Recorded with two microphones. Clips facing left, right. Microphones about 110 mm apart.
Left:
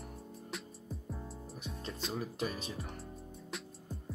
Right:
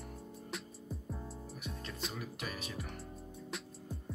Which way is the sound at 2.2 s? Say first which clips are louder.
Left 5 dB; 30° left (ahead or behind).